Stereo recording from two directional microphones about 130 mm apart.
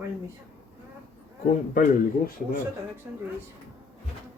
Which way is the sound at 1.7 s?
90° left.